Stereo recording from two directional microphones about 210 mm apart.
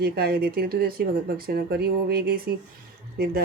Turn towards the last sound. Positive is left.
turn(degrees=-45)  # may be behind; listen again after turning